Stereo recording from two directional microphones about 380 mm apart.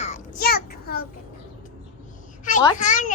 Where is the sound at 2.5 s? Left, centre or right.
Centre.